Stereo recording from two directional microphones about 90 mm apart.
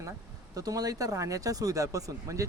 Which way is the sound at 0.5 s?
40° right (ahead or behind).